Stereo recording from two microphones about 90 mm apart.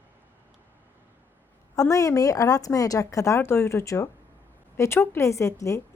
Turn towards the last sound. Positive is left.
turn(degrees=35)  # may be behind; listen again after turning